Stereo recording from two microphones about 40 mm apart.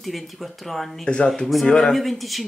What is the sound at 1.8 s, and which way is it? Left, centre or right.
Speech, centre.